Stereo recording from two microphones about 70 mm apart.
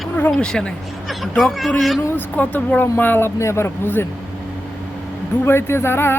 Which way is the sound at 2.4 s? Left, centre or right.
Left.